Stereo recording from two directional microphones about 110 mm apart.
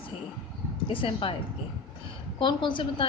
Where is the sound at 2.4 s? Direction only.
45° left (ahead or behind).